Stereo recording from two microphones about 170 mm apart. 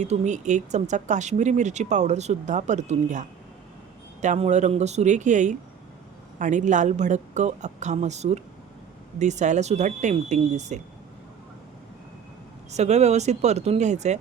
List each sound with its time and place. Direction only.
0.0 s speech: 45° right (ahead or behind)
12.7 s speech: 40° right (ahead or behind)